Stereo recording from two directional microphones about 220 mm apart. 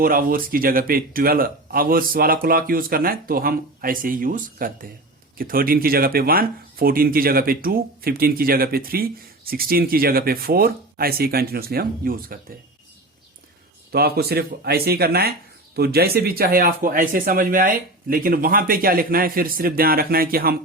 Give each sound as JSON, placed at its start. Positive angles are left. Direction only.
{"t": 0.0, "sound": "speech", "side_deg": -40}
{"t": 13.9, "sound": "speech", "side_deg": -45}